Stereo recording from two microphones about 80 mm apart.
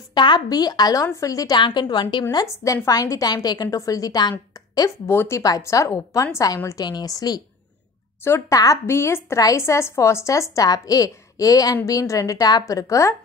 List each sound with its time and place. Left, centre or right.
0.1 s speech: left
1.2 s speech: left
1.6 s a woman's voice: left
2.4 s speech: left
4.8 s a woman's voice: left
8.2 s a woman's voice: left